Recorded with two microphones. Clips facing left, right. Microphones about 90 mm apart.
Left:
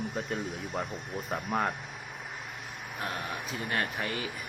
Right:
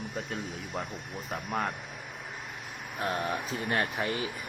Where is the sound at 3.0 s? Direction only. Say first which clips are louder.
Right 5 dB; 35° right (ahead or behind).